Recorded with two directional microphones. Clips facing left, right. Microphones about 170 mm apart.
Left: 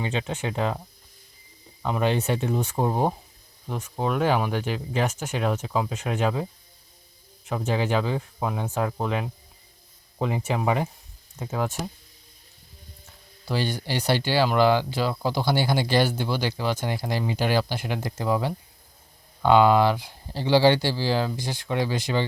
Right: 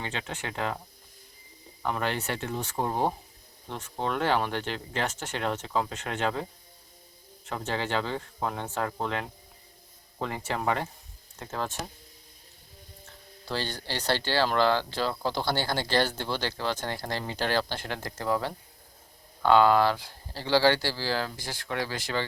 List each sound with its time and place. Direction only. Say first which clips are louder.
0.0 s speech: left 7 dB; 20° left (ahead or behind)
1.8 s speech: left 6 dB; 20° left (ahead or behind)
7.4 s speech: left 6 dB; 10° left (ahead or behind)
13.5 s speech: left 6 dB; 10° left (ahead or behind)